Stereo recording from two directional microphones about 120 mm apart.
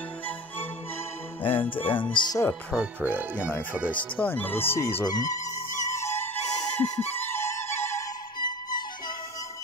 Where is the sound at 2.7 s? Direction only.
10° right (ahead or behind).